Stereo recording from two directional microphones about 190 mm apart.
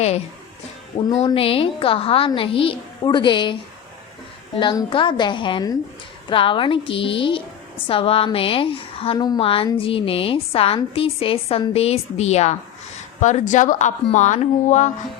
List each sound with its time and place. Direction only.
0.9 s a woman's voice: 30° left (ahead or behind)
4.5 s a woman's voice: 25° left (ahead or behind)